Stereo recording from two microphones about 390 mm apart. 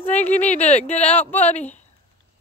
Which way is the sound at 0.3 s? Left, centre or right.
Centre.